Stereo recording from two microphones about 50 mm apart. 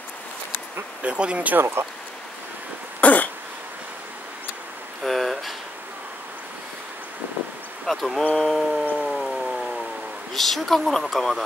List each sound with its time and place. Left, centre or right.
1.0 s speech: right
3.0 s cough: left
5.0 s a sound: centre
7.8 s speech: centre
8.4 s a sound: centre
10.3 s speech: centre